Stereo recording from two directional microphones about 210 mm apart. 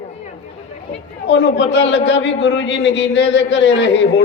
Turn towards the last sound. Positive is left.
turn(degrees=60)  # may be behind; listen again after turning